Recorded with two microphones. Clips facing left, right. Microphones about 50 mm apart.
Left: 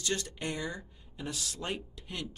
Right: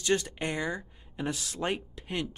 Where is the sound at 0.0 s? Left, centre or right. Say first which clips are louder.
Right 6 dB; right.